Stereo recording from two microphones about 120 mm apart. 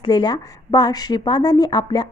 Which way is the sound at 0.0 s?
40° left (ahead or behind).